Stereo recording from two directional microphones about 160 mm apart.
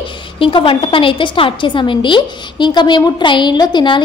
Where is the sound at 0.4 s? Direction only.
35° left (ahead or behind).